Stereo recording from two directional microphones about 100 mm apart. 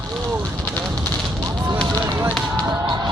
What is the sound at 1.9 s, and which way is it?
Fire, 40° right (ahead or behind).